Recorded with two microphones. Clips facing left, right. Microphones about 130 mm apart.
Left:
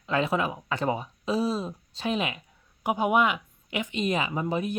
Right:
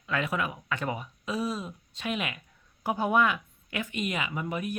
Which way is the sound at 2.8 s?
15° left (ahead or behind).